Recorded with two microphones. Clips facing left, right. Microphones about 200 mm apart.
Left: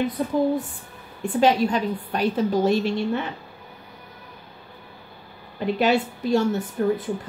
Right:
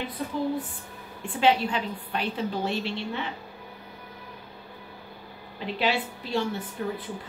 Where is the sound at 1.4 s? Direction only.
40° left (ahead or behind).